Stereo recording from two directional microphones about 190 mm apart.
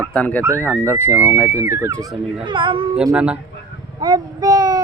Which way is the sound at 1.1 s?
10° right (ahead or behind).